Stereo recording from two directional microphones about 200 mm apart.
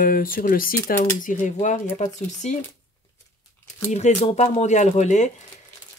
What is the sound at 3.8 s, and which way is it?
Speech, 30° left (ahead or behind).